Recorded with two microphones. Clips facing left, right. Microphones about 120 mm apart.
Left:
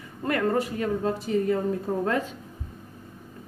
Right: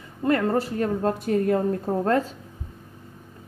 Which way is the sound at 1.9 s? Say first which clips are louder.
Right 3 dB; 40° right (ahead or behind).